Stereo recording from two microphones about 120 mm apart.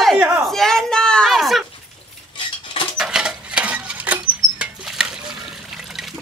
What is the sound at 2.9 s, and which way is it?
Rodents, 5° right (ahead or behind).